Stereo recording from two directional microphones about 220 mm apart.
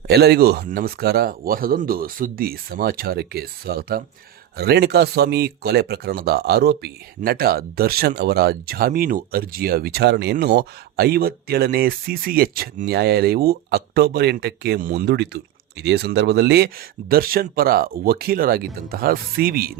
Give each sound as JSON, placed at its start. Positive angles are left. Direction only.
{"t": 0.1, "sound": "speech", "side_deg": -45}